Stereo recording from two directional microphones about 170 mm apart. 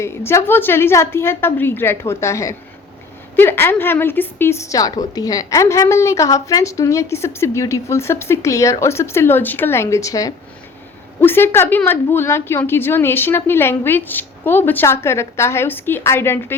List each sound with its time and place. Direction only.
0.3 s a woman's voice: 15° left (ahead or behind)